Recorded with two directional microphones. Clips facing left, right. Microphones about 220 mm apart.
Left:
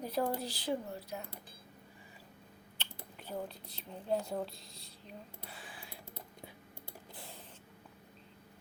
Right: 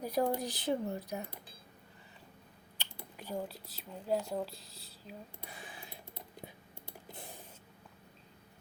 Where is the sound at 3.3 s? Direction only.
5° right (ahead or behind).